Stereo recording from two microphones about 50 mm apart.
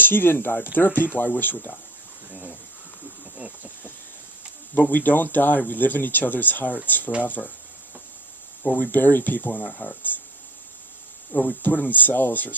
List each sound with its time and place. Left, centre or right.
0.0 s speech: left
2.3 s speech: right
3.3 s a sound: right
4.7 s speech: left
8.6 s speech: left
11.3 s speech: left